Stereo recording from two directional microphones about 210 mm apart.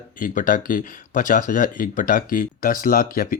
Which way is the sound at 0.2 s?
40° left (ahead or behind).